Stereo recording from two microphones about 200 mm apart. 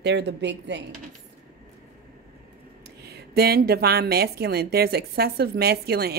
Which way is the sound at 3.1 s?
55° right (ahead or behind).